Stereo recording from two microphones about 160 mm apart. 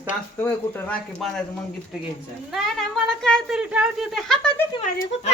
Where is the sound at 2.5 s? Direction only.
Centre (ahead or behind).